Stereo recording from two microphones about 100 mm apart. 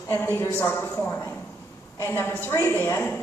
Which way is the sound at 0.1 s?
20° left (ahead or behind).